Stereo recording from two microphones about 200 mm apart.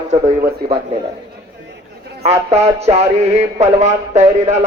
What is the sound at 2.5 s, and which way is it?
A man's voice, 35° right (ahead or behind).